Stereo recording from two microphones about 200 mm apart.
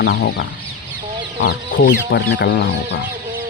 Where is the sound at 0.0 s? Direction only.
55° left (ahead or behind).